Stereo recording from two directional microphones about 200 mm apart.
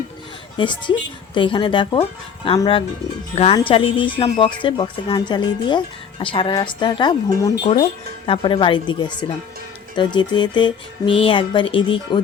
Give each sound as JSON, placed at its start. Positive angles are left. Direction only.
{"t": 0.5, "sound": "speech", "side_deg": 25}